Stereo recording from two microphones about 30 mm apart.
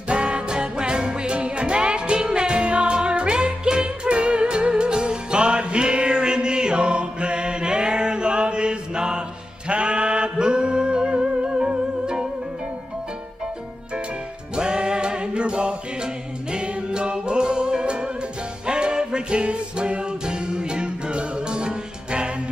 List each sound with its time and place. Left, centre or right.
0.1 s music: right
14.5 s music: right
19.4 s music: right